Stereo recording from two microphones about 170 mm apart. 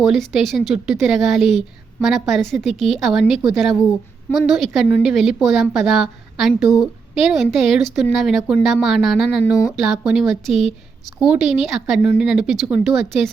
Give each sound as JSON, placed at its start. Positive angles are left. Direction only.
{"t": 0.0, "sound": "speech", "side_deg": 0}
{"t": 9.1, "sound": "speech", "side_deg": 75}
{"t": 9.6, "sound": "speech", "side_deg": 0}